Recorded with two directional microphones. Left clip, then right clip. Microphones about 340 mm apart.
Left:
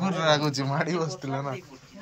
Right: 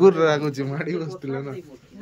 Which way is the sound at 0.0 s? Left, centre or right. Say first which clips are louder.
Right 7 dB; centre.